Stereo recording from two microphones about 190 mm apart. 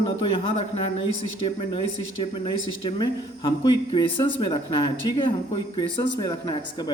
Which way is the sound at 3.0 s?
20° left (ahead or behind).